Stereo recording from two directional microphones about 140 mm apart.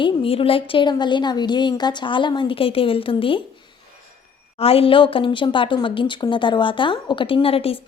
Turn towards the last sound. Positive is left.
turn(degrees=45)  # may be behind; listen again after turning